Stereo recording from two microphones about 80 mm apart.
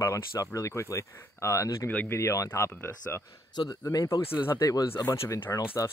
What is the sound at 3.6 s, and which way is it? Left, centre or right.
Speech, left.